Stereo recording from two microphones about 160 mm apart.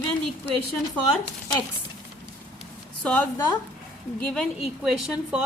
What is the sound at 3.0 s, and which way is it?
A woman's voice, 10° left (ahead or behind).